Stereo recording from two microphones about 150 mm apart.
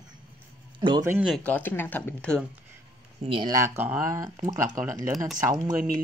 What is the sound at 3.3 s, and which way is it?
Speech, 35° right (ahead or behind).